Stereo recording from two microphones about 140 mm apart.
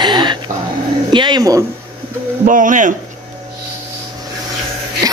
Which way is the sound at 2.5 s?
70° right (ahead or behind).